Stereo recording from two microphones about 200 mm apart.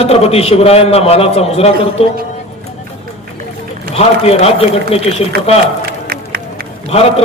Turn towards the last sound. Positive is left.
turn(degrees=30)  # may be behind; listen again after turning